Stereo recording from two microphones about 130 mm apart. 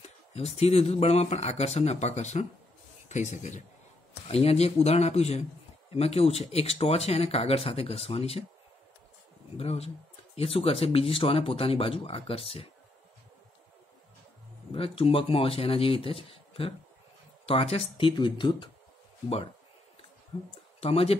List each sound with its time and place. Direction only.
0.3 s speech: 55° left (ahead or behind)
4.3 s speech: 50° left (ahead or behind)
9.6 s speech: 50° left (ahead or behind)
14.7 s speech: 45° left (ahead or behind)